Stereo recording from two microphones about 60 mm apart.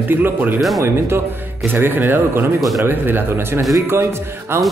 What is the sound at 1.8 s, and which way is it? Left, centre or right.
A man's voice, right.